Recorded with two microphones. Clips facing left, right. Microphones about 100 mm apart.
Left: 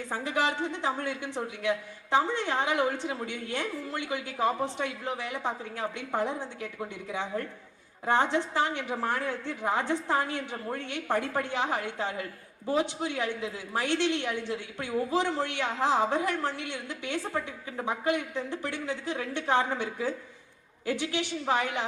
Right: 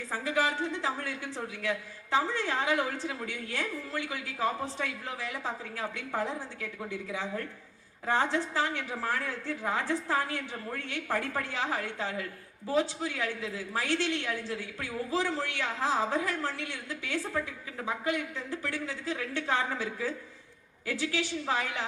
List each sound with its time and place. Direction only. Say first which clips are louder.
0.1 s a woman's voice: even; 20° left (ahead or behind)